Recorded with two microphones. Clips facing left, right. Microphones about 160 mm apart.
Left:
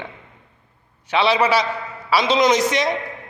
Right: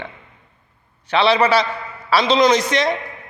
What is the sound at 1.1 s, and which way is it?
A woman's voice, 15° left (ahead or behind).